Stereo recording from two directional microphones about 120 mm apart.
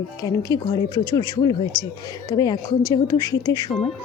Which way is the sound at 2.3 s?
30° left (ahead or behind).